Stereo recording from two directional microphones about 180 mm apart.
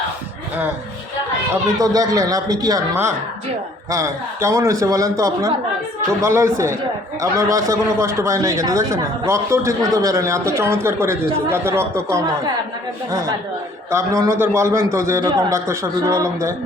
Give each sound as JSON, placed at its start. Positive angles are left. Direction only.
{"t": 1.8, "sound": "a man's voice", "side_deg": -20}
{"t": 13.9, "sound": "a man's voice", "side_deg": -15}